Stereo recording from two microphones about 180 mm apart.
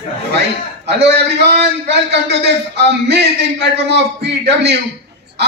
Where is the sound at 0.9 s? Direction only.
70° right (ahead or behind).